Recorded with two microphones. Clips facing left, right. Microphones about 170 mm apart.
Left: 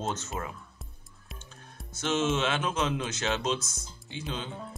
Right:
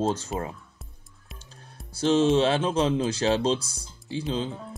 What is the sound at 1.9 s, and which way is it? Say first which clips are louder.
Speech: right 8 dB; 30° right (ahead or behind).